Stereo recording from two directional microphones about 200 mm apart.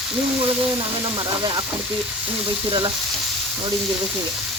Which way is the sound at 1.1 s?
20° right (ahead or behind).